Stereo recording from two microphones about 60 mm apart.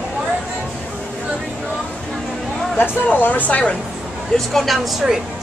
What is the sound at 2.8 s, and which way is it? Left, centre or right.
Speech, left.